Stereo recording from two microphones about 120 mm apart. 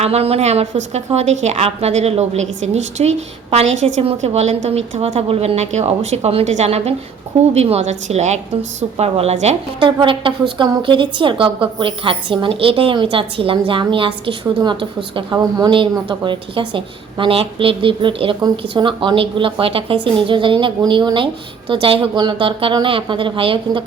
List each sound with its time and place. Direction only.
0.0 s a woman's voice: 60° right (ahead or behind); by 8.4 s 75° right (ahead or behind)
9.0 s a woman's voice: 60° right (ahead or behind)
9.8 s a woman's voice: 45° right (ahead or behind)